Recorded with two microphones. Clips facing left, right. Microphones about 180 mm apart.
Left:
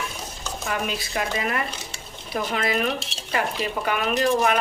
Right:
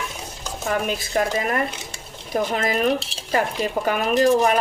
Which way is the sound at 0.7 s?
45° right (ahead or behind).